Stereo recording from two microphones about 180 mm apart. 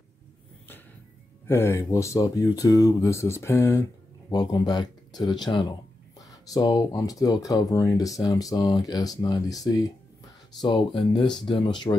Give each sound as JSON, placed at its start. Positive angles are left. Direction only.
{"t": 1.5, "sound": "speech", "side_deg": 15}